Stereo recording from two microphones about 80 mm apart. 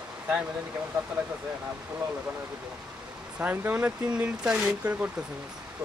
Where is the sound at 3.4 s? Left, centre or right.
Right.